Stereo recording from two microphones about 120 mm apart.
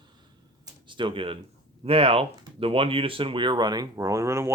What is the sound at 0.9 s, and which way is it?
Speech, 40° right (ahead or behind).